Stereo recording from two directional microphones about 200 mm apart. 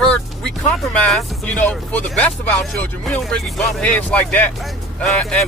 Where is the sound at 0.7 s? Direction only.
5° left (ahead or behind).